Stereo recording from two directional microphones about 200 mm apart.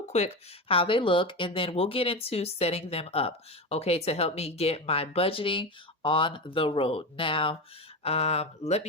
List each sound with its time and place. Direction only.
0.7 s speech: 25° left (ahead or behind)